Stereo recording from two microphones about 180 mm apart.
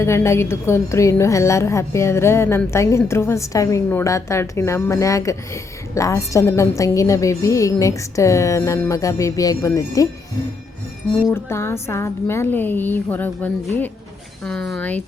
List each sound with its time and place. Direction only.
0.0 s a woman's voice: 15° left (ahead or behind)
11.3 s a woman's voice: 15° left (ahead or behind)